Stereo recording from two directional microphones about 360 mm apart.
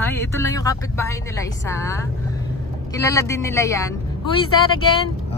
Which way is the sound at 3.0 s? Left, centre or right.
Centre.